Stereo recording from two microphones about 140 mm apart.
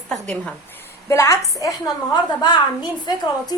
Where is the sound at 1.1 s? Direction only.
20° left (ahead or behind).